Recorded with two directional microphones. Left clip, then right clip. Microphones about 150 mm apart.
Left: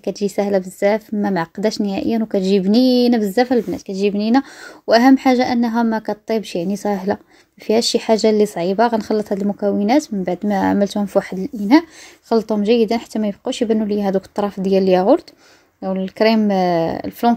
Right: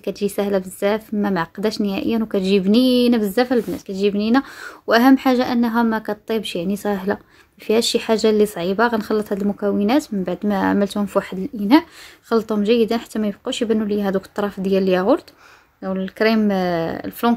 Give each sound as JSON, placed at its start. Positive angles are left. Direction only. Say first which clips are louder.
{"t": 0.0, "sound": "a woman's voice", "louder": "left 2 dB", "side_deg": 15}